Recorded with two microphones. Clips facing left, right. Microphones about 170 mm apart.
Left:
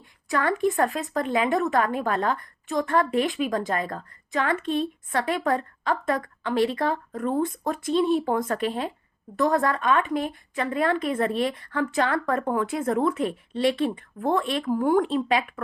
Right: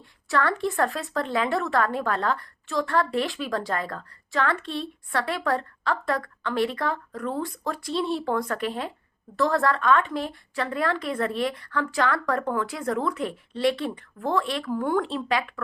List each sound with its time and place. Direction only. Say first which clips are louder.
0.3 s a woman's voice: left 2 dB; 15° left (ahead or behind)